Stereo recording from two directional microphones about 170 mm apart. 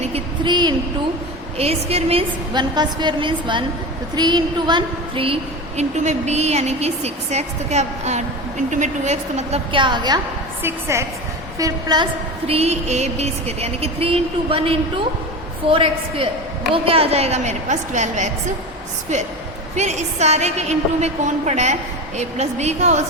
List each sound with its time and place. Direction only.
0.1 s a sound: 25° right (ahead or behind)
1.5 s a woman's voice: 35° right (ahead or behind)
9.7 s a woman's voice: 25° right (ahead or behind)
10.6 s a woman's voice: 15° right (ahead or behind)
12.5 s a woman's voice: 40° right (ahead or behind)
19.7 s a woman's voice: 40° right (ahead or behind)